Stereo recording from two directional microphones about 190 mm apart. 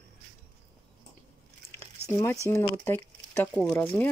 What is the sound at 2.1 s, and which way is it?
Speech, 15° left (ahead or behind).